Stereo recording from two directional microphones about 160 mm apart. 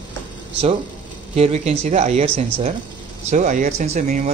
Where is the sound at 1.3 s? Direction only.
40° right (ahead or behind).